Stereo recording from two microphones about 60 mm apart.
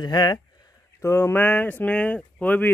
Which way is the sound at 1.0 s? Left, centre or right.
Left.